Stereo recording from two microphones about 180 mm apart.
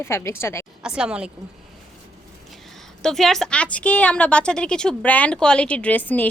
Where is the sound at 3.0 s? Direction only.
Centre (ahead or behind).